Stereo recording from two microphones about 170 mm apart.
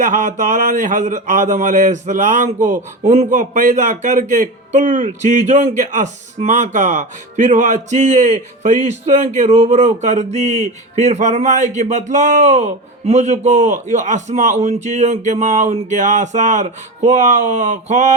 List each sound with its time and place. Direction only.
0.0 s speech: 50° right (ahead or behind)